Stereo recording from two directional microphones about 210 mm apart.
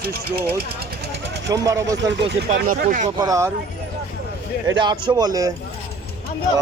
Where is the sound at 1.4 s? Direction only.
15° right (ahead or behind).